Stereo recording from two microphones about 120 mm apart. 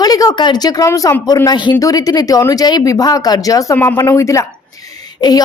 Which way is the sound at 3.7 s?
15° left (ahead or behind).